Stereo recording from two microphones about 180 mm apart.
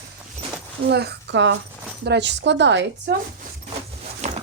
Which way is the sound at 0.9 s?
65° right (ahead or behind).